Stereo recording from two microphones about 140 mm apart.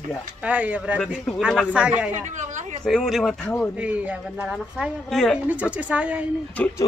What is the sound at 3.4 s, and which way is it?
Speech, 10° left (ahead or behind).